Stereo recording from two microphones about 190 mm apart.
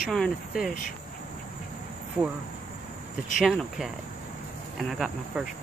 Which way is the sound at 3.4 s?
Centre (ahead or behind).